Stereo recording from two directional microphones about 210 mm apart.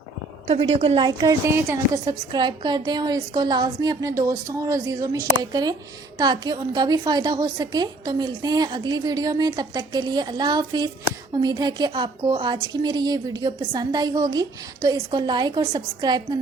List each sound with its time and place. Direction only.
0.4 s a woman's voice: 25° right (ahead or behind)